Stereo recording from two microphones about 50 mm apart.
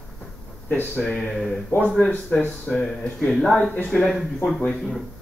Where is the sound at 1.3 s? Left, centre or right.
Centre.